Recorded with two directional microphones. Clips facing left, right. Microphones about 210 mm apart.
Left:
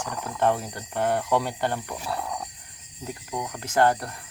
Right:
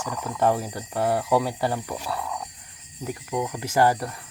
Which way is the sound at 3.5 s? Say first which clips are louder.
Even; 10° right (ahead or behind).